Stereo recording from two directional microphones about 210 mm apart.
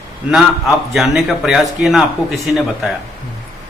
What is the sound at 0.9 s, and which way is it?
A man's voice, centre (ahead or behind).